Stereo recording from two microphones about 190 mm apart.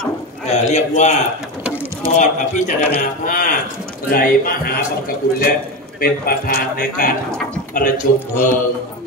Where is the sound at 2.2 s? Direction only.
40° left (ahead or behind).